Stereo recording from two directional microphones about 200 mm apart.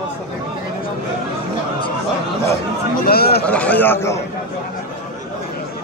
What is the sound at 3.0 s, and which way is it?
Speech, 50° left (ahead or behind).